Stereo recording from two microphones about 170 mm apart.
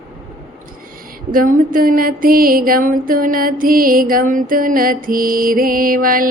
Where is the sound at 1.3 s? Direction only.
55° right (ahead or behind).